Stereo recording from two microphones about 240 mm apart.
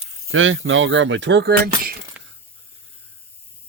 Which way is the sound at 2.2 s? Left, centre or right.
Centre.